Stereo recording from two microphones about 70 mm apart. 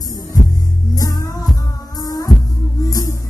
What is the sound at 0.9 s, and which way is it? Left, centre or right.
Music, left.